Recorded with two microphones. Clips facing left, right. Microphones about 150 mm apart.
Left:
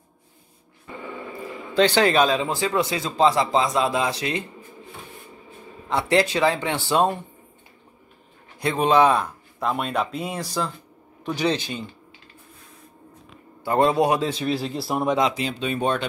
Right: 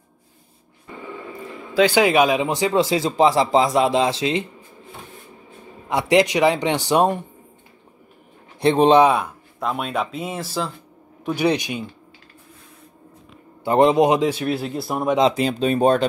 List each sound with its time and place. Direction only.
1.5 s speech: 5° right (ahead or behind); by 4.5 s 25° right (ahead or behind)
5.9 s speech: 15° right (ahead or behind)
8.5 s speech: 30° right (ahead or behind)
9.0 s speech: 5° right (ahead or behind)
13.7 s speech: 20° right (ahead or behind)
14.3 s speech: centre (ahead or behind)
15.3 s speech: 40° right (ahead or behind)